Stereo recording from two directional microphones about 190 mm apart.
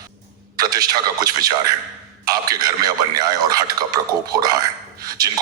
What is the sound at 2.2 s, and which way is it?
Speech, 20° right (ahead or behind).